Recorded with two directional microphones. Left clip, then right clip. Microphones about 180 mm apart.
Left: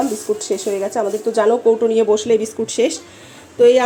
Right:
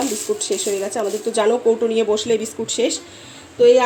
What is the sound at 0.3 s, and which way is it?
Speech, 5° left (ahead or behind).